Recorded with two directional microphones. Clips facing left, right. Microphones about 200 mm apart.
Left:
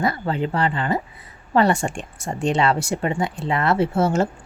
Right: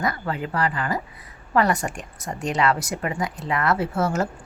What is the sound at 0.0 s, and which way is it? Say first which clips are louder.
A woman's voice: left 4 dB; 30° left (ahead or behind).